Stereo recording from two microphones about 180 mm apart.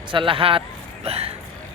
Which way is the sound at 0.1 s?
30° right (ahead or behind).